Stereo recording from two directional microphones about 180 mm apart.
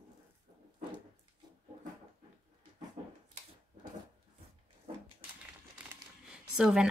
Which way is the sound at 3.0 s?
40° right (ahead or behind).